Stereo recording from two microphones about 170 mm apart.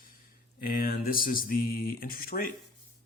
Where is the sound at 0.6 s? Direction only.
60° left (ahead or behind).